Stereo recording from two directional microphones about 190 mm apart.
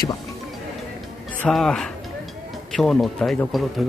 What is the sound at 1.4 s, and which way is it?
Speech, 5° left (ahead or behind).